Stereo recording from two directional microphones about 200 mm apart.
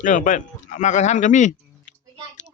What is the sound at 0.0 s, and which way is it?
Speech, 40° left (ahead or behind).